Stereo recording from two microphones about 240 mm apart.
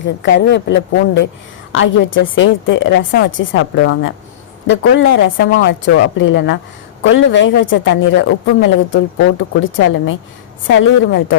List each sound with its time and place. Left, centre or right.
0.2 s speech: left